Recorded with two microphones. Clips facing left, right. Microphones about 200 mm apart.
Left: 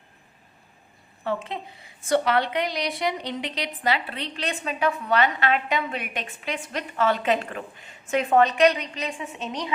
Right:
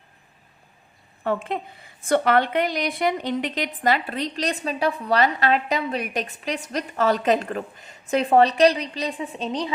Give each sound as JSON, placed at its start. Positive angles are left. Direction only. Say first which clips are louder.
{"t": 1.2, "sound": "a woman's voice", "louder": "right 4 dB", "side_deg": -50}